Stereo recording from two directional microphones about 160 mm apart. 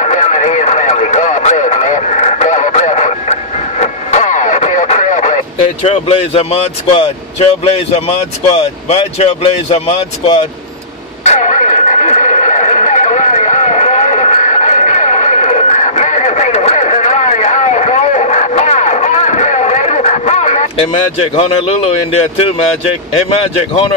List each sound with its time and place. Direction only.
0.0 s radio: 50° left (ahead or behind)
11.2 s a sound: 50° left (ahead or behind)
22.8 s speech: 40° left (ahead or behind)